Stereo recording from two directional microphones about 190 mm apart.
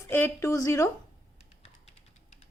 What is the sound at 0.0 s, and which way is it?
Speech, 15° left (ahead or behind).